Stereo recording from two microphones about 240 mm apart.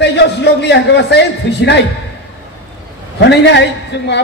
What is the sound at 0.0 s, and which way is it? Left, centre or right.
A man's voice, left.